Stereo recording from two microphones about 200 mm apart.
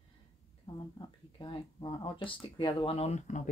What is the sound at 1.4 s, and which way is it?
Speech, 20° left (ahead or behind).